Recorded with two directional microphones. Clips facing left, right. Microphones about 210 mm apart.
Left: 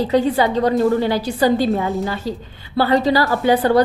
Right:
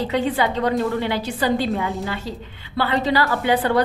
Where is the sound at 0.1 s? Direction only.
40° left (ahead or behind).